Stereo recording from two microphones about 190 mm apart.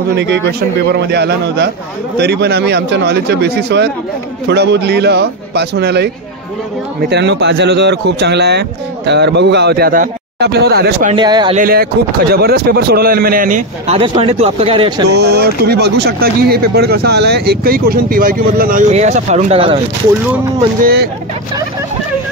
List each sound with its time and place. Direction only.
0.1 s speech: 65° right (ahead or behind)
11.1 s speech: 25° right (ahead or behind)
11.5 s speech: 50° right (ahead or behind); by 15.0 s 25° right (ahead or behind)
15.0 s speech: 60° right (ahead or behind); by 19.8 s 30° right (ahead or behind)
20.8 s speech: 55° right (ahead or behind)